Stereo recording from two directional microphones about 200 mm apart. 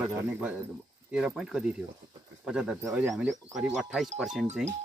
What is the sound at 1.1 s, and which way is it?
Speech, 5° right (ahead or behind).